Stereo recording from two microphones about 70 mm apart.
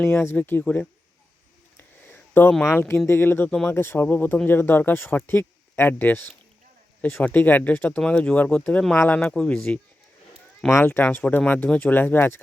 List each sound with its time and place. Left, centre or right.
0.0 s speech: left
2.0 s a sound: left
2.6 s speech: left
9.3 s speech: centre
10.7 s speech: left